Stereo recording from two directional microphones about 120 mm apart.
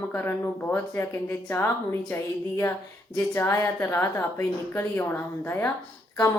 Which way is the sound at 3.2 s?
25° left (ahead or behind).